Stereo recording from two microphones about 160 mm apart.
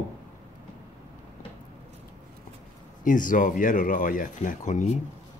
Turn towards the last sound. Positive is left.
turn(degrees=50)  # may be behind; listen again after turning